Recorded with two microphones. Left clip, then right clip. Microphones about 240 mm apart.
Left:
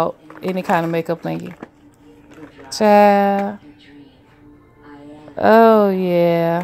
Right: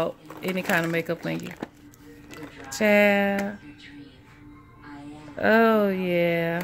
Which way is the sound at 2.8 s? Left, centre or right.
Centre.